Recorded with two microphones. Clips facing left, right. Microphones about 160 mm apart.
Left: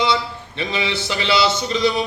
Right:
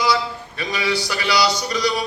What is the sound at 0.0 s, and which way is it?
A man's voice, 25° left (ahead or behind).